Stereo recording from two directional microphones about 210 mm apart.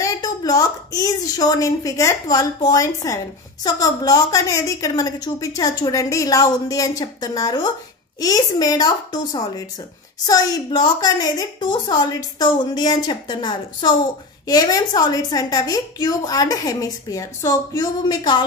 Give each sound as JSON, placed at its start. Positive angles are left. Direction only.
{"t": 0.0, "sound": "a woman's voice", "side_deg": 20}